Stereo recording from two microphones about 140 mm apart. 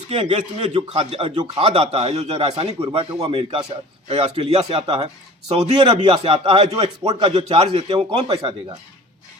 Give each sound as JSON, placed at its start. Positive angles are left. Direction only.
{"t": 0.1, "sound": "a man's voice", "side_deg": -50}